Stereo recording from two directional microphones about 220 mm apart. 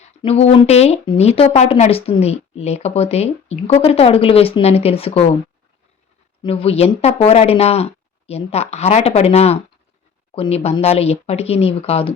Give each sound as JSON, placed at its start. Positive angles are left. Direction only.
{"t": 0.0, "sound": "speech", "side_deg": 25}
{"t": 6.4, "sound": "speech", "side_deg": 25}